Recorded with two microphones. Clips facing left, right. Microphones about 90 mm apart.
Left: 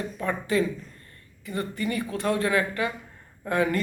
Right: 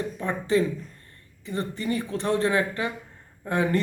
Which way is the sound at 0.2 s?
25° right (ahead or behind).